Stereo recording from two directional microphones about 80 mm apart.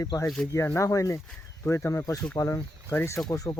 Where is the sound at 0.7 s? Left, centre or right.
Left.